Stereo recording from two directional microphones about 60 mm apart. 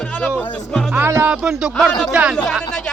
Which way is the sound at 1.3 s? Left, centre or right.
Centre.